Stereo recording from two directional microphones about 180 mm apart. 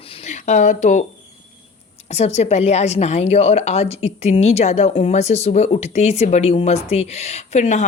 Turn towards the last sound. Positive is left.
turn(degrees=40)  # may be behind; listen again after turning